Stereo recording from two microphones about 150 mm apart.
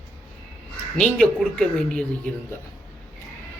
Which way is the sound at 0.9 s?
5° left (ahead or behind).